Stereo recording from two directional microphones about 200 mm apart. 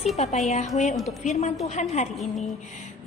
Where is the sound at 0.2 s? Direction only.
35° left (ahead or behind).